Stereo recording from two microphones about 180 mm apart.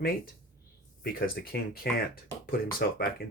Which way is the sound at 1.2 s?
55° left (ahead or behind).